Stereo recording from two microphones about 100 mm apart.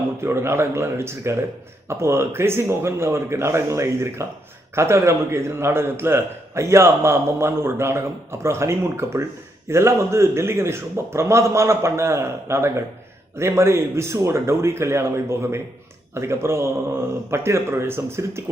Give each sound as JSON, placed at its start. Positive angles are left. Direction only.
{"t": 0.2, "sound": "a man's voice", "side_deg": -25}